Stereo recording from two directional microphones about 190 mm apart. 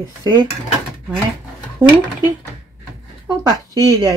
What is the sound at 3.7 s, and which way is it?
Speech, 20° right (ahead or behind).